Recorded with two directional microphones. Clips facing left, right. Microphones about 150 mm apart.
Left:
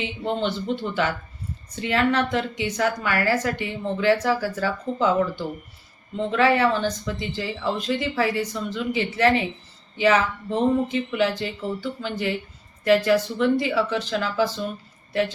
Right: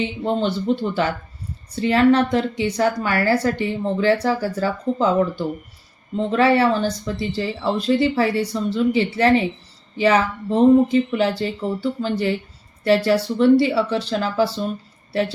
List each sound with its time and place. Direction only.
0.0 s a woman's voice: 40° right (ahead or behind)
6.3 s a woman's voice: 35° right (ahead or behind)